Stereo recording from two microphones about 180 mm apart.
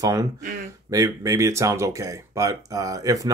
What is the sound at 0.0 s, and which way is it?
Speech, 20° right (ahead or behind).